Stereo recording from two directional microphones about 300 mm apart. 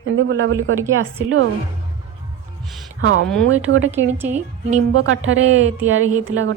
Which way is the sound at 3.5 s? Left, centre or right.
Right.